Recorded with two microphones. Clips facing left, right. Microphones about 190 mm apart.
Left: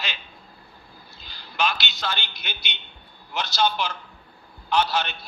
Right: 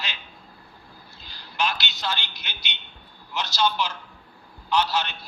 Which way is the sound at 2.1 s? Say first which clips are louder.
Even; 55° left (ahead or behind).